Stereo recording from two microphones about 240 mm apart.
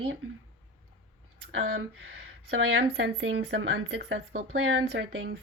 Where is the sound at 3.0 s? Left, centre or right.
Right.